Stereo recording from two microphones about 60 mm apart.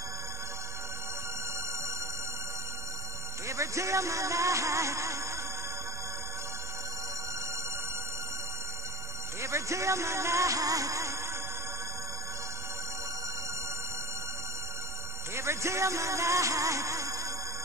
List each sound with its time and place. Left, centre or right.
3.4 s music: right
9.4 s music: right
15.3 s music: right